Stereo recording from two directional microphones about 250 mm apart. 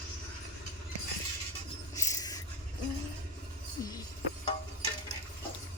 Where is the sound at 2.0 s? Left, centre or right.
Centre.